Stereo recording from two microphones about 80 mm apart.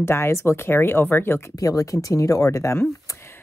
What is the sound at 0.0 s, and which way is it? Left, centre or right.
Speech, left.